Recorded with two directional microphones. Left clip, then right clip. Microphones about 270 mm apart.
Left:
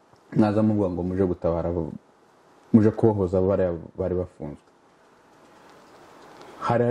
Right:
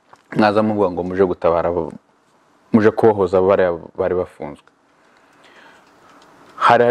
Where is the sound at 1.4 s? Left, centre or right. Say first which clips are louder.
Right 9 dB; centre.